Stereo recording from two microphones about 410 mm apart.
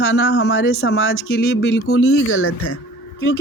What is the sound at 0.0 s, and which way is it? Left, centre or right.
Speech, left.